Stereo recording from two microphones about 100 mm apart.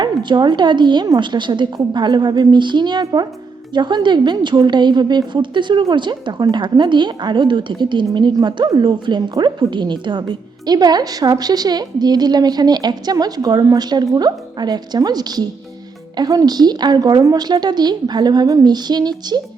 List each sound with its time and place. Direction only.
0.0 s a woman's voice: 50° right (ahead or behind)